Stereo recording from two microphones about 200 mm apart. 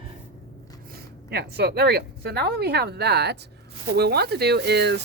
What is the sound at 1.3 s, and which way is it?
A woman's voice, 55° right (ahead or behind).